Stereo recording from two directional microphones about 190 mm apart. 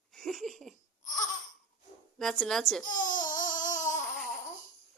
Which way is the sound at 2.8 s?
45° left (ahead or behind).